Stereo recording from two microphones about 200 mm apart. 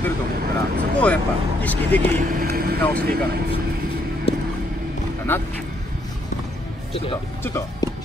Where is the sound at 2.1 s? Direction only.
45° right (ahead or behind).